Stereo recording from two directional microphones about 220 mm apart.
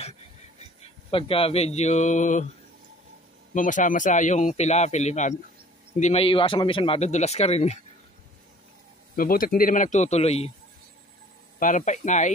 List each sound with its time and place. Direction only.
1.1 s speech: 25° left (ahead or behind)
3.5 s speech: 35° left (ahead or behind)
9.1 s speech: 40° left (ahead or behind)
11.6 s speech: 35° left (ahead or behind)